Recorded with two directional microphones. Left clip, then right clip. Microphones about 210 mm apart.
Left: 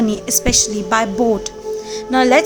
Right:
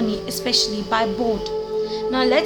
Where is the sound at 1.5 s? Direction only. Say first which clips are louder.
Right 1 dB; 30° left (ahead or behind).